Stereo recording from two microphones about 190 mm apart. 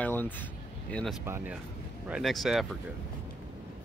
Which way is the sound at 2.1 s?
Centre (ahead or behind).